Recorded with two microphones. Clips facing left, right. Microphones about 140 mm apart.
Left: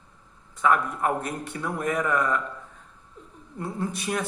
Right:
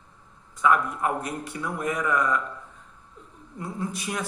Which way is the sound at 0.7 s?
50° left (ahead or behind).